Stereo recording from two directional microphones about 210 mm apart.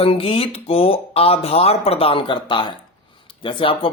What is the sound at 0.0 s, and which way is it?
Speech, 25° left (ahead or behind).